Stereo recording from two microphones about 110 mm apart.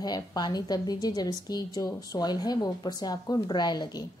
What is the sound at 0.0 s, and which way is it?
A woman's voice, 40° left (ahead or behind).